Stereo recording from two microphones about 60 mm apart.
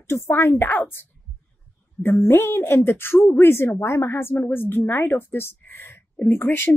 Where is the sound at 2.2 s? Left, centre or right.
Left.